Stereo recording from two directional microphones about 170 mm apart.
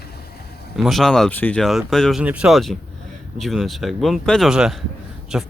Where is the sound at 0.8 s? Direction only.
Centre (ahead or behind).